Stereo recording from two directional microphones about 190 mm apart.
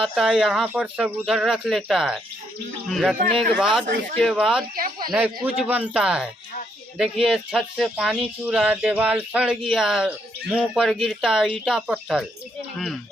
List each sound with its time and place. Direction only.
0.0 s speech: centre (ahead or behind)
4.7 s speech: 50° right (ahead or behind)
5.1 s speech: 5° right (ahead or behind)